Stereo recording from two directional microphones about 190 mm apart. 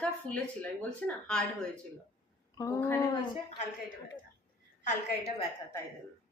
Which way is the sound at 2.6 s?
15° left (ahead or behind).